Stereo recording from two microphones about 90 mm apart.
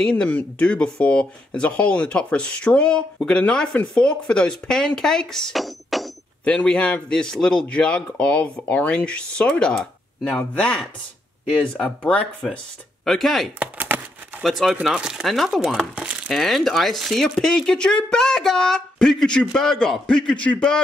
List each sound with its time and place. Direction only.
0.0 s a man's voice: 10° left (ahead or behind)
6.4 s a man's voice: 10° left (ahead or behind)
13.0 s speech: centre (ahead or behind)
13.6 s a sound: 20° right (ahead or behind)
14.4 s a man's voice: centre (ahead or behind)